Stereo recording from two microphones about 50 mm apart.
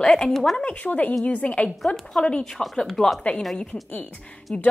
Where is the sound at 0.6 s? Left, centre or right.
Left.